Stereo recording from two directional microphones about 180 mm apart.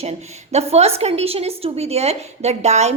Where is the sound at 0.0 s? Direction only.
35° right (ahead or behind).